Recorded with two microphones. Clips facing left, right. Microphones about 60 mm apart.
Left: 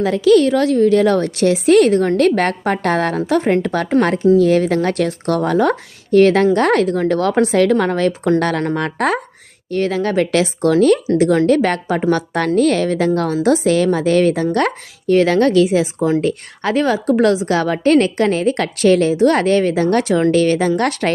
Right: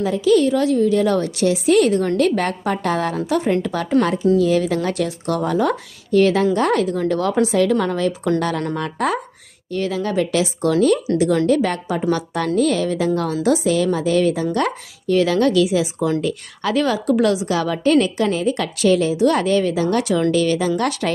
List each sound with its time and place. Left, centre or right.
0.0 s a woman's voice: left